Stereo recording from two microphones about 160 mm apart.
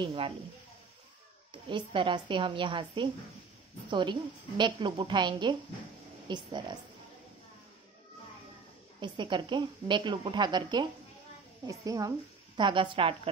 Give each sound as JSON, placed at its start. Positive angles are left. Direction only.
{"t": 0.0, "sound": "a woman's voice", "side_deg": -35}
{"t": 1.5, "sound": "a woman's voice", "side_deg": -30}
{"t": 9.0, "sound": "a woman's voice", "side_deg": -30}